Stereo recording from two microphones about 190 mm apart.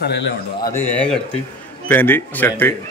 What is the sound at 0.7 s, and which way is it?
Speech, 10° left (ahead or behind).